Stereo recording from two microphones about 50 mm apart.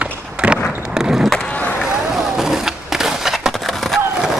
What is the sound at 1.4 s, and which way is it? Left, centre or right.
Skateboard, left.